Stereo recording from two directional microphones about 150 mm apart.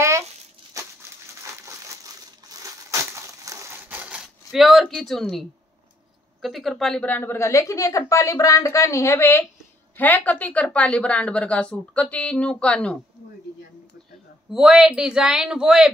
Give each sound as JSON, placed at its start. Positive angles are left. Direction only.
{"t": 2.4, "sound": "crushing", "side_deg": -20}
{"t": 6.4, "sound": "a woman's voice", "side_deg": 0}
{"t": 14.5, "sound": "speech", "side_deg": -5}